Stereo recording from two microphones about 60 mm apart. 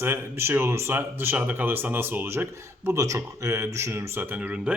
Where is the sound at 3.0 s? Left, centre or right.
Right.